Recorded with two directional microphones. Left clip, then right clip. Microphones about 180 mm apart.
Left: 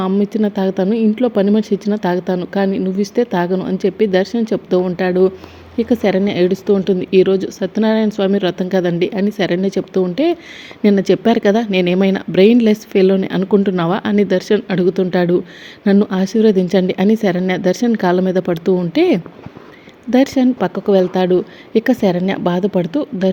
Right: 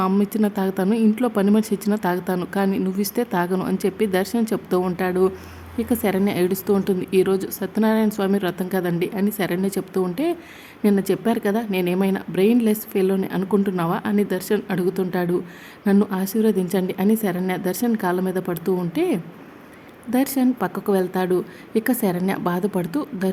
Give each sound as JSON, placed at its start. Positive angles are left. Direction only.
{"t": 0.1, "sound": "a woman's voice", "side_deg": 0}